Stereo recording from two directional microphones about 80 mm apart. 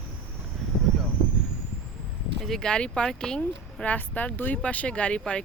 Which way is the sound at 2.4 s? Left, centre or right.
Centre.